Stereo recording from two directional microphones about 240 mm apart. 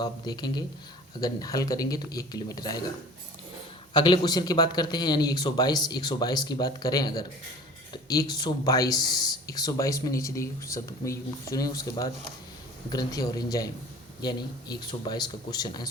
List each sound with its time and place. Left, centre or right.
0.0 s speech: centre
3.9 s speech: centre